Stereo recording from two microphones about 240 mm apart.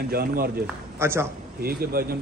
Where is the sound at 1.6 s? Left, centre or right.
Right.